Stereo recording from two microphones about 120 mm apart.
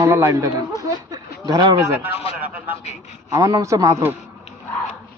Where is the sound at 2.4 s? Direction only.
10° right (ahead or behind).